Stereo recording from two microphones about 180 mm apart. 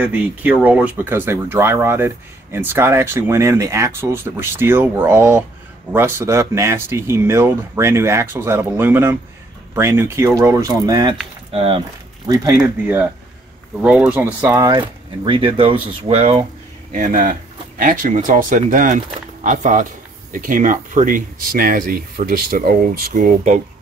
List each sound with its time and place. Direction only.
0.0 s speech: 5° right (ahead or behind)
11.5 s speech: 30° right (ahead or behind)
12.8 s speech: 10° right (ahead or behind)
14.4 s speech: 20° right (ahead or behind)
16.9 s speech: 50° right (ahead or behind)